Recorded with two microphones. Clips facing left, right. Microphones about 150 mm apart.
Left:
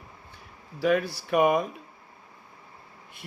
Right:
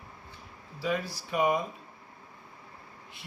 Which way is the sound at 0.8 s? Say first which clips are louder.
Left 7 dB; 65° left (ahead or behind).